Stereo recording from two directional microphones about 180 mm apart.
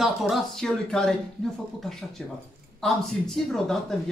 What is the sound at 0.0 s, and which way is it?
Speech, centre (ahead or behind).